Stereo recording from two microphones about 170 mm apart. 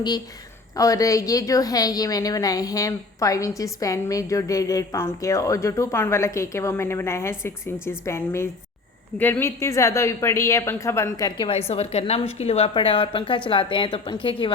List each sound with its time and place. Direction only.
0.8 s a woman's voice: 20° left (ahead or behind)